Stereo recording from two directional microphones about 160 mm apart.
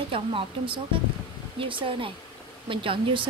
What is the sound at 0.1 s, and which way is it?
A woman's voice, 35° right (ahead or behind).